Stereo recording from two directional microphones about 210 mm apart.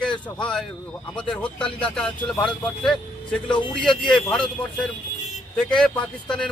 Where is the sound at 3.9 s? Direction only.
20° left (ahead or behind).